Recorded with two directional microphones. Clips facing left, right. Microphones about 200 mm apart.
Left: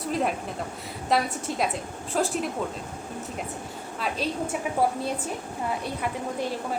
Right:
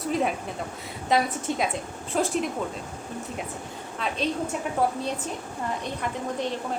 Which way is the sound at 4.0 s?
5° left (ahead or behind).